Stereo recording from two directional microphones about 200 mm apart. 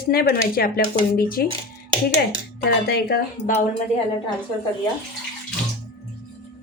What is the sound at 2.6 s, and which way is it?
Speech, 55° left (ahead or behind).